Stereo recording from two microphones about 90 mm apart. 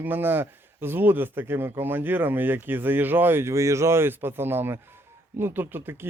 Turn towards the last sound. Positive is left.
turn(degrees=-25)  # may be behind; listen again after turning